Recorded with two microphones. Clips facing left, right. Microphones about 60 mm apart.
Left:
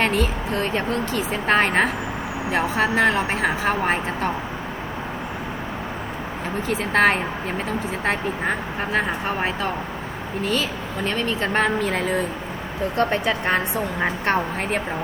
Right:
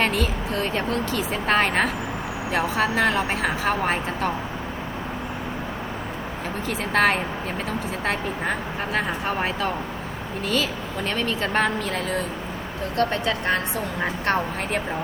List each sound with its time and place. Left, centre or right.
0.0 s speech: centre
6.7 s speech: centre